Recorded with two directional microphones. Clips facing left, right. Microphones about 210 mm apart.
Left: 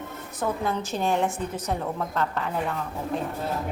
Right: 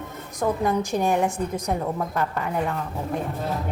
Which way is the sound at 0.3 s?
15° right (ahead or behind).